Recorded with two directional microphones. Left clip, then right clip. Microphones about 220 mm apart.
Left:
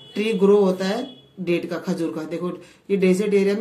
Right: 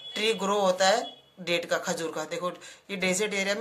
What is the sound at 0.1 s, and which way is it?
Speech, 40° right (ahead or behind).